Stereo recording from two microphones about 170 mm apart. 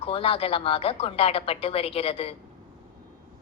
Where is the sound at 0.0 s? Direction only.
35° left (ahead or behind).